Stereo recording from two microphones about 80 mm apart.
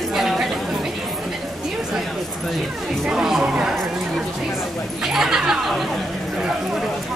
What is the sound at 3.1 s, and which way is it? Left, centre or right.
Speech, centre.